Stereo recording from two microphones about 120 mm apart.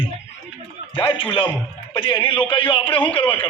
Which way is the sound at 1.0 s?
50° left (ahead or behind).